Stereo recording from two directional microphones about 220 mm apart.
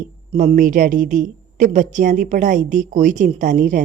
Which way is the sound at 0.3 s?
35° right (ahead or behind).